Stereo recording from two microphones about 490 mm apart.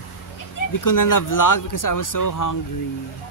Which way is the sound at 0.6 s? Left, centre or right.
Left.